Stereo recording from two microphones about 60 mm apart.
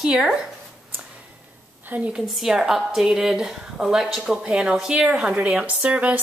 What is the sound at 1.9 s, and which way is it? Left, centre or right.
Speech, right.